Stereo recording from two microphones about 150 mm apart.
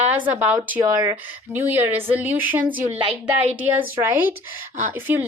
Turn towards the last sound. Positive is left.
turn(degrees=-15)  # may be behind; listen again after turning